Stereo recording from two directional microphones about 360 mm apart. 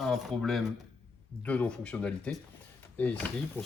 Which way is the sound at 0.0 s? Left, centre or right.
Centre.